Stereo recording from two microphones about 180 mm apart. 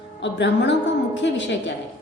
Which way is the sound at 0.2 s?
80° left.